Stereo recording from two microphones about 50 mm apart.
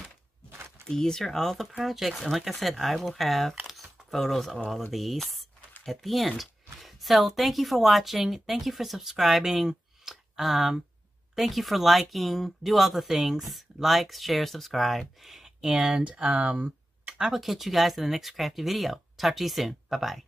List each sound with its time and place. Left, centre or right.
0.7 s speech: centre
3.6 s camera: centre
4.9 s speech: centre; by 17.1 s right
17.2 s speech: centre